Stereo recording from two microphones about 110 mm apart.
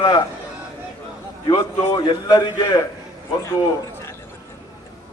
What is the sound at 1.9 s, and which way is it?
Speech, 40° left (ahead or behind).